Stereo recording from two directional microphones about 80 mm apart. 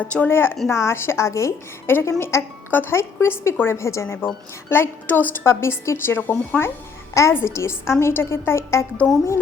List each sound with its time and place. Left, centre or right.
0.0 s a woman's voice: centre
0.3 s a woman's voice: left
7.1 s a child's voice: left